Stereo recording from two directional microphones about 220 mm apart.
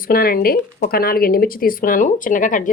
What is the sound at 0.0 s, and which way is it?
Speech, 40° left (ahead or behind).